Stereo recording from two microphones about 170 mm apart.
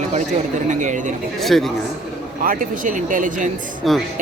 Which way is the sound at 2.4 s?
50° right (ahead or behind).